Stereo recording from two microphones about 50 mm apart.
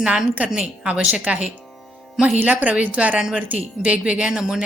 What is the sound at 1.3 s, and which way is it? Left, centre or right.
Speech, right.